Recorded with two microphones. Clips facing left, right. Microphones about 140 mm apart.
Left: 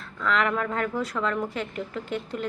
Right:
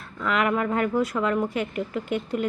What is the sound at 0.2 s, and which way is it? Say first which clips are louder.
A woman's voice: right 2 dB; 10° right (ahead or behind).